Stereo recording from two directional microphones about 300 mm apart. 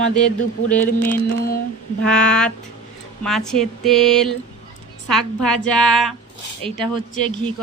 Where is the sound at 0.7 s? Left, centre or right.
Left.